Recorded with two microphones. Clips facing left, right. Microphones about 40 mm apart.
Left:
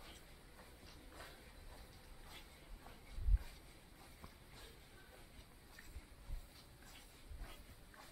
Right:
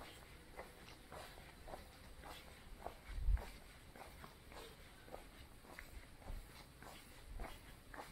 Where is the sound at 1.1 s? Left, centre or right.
Right.